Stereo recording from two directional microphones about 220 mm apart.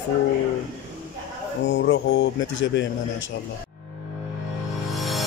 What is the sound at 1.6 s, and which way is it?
Speech, 60° left (ahead or behind).